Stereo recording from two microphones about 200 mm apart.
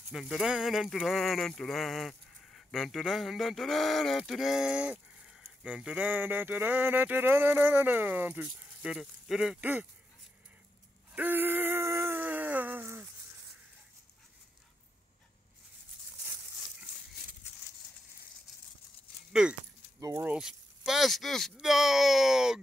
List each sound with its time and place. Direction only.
0.1 s speech: centre (ahead or behind)
11.1 s a sound: 10° right (ahead or behind)
19.4 s speech: 5° right (ahead or behind)